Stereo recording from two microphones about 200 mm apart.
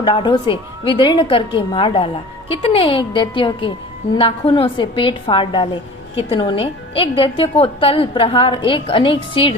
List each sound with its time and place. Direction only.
0.0 s a woman's voice: 25° left (ahead or behind)